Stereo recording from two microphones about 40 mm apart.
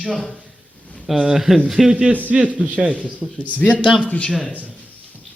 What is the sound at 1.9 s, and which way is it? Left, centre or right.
A man's voice, right.